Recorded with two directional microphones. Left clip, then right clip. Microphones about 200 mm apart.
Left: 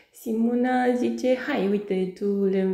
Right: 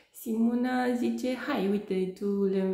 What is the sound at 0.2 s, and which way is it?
A woman's voice, 5° left (ahead or behind).